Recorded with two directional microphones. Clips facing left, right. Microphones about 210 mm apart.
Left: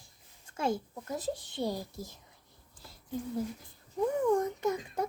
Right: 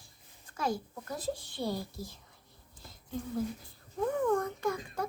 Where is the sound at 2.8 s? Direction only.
10° left (ahead or behind).